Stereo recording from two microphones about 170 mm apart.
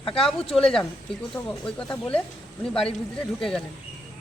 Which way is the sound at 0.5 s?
Centre (ahead or behind).